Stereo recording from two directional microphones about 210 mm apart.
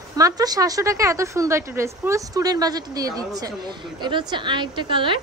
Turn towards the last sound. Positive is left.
turn(degrees=-25)  # may be behind; listen again after turning